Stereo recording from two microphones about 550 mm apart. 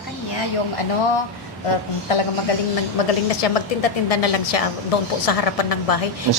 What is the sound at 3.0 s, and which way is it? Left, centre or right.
A woman's voice, left.